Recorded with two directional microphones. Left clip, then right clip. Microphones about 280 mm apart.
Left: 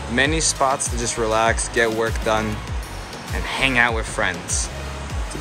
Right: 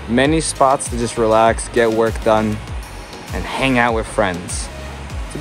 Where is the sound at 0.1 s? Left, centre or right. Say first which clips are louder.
Right 4 dB; centre.